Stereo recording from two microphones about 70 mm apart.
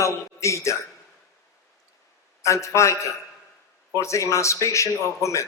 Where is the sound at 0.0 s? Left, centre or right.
Left.